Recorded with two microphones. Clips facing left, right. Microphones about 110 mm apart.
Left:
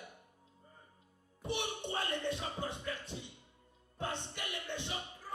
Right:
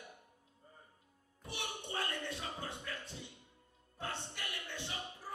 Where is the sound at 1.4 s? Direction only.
20° left (ahead or behind).